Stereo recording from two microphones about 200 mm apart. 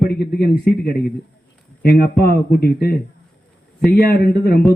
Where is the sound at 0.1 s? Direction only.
50° left (ahead or behind).